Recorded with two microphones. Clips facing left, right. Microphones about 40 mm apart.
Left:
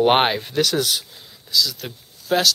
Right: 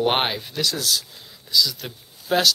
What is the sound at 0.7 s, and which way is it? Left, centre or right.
Speech, left.